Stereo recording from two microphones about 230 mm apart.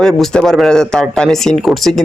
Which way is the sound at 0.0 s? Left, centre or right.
Centre.